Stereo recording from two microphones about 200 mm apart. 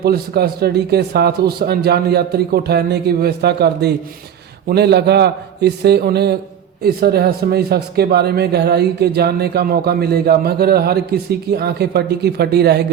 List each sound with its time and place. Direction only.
0.0 s a man's voice: 50° right (ahead or behind)